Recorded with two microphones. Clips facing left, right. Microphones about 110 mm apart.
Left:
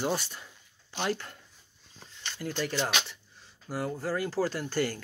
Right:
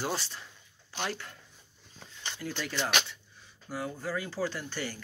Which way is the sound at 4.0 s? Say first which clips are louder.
Left 4 dB; 40° left (ahead or behind).